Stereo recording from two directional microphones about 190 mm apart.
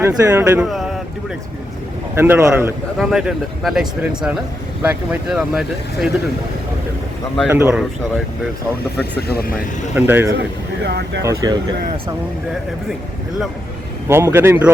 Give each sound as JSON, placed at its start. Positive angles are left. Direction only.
{"t": 0.0, "sound": "speech", "side_deg": -15}
{"t": 2.1, "sound": "speech", "side_deg": -10}
{"t": 3.0, "sound": "speech", "side_deg": 0}
{"t": 7.4, "sound": "speech", "side_deg": -10}
{"t": 9.2, "sound": "speech", "side_deg": 55}
{"t": 9.9, "sound": "speech", "side_deg": -10}
{"t": 10.8, "sound": "speech", "side_deg": -60}
{"t": 11.3, "sound": "speech", "side_deg": -15}
{"t": 14.1, "sound": "speech", "side_deg": -10}